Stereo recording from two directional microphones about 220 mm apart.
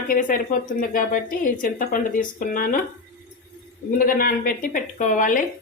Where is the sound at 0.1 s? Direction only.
40° left (ahead or behind).